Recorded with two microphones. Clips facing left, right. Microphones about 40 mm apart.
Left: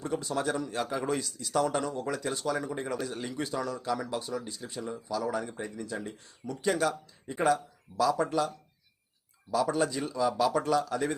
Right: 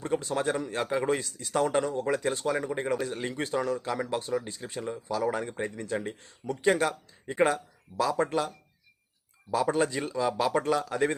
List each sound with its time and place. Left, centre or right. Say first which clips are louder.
0.0 s speech: right 2 dB; right
3.0 s speech: right 3 dB; right
3.2 s speech: right 5 dB; right